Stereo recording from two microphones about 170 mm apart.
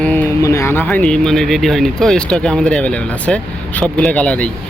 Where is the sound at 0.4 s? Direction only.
15° left (ahead or behind).